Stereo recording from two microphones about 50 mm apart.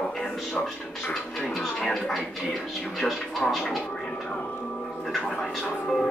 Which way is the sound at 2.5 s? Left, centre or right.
Centre.